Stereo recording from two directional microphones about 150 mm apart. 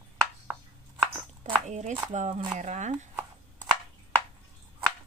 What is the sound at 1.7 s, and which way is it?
Speech, 50° right (ahead or behind).